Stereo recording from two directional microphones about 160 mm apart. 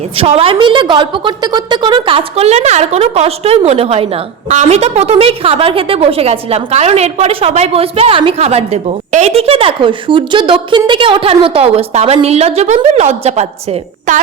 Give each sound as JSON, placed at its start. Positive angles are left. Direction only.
{"t": 0.2, "sound": "a woman's voice", "side_deg": -35}
{"t": 14.1, "sound": "a woman's voice", "side_deg": -50}